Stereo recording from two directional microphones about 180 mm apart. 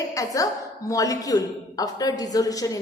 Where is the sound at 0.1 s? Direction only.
20° left (ahead or behind).